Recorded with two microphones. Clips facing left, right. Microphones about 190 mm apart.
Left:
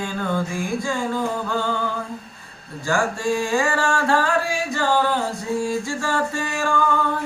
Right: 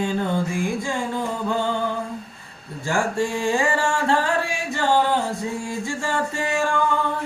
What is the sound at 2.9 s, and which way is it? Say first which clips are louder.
Singing: left 1 dB; 25° right (ahead or behind).